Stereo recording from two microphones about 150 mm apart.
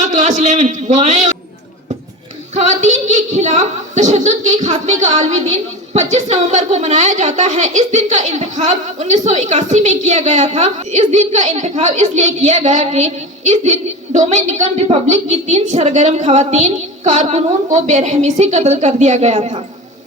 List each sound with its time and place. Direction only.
0.0 s a man's voice: 50° right (ahead or behind)
2.6 s a woman's voice: 50° right (ahead or behind)